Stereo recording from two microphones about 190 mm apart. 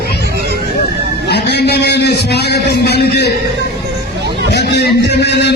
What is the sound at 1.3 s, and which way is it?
A man's voice, 60° left (ahead or behind).